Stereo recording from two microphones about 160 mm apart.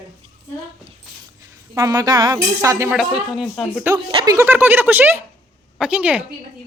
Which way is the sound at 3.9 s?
20° right (ahead or behind).